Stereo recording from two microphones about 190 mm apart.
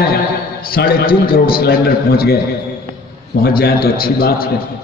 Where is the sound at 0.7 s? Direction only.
50° left (ahead or behind).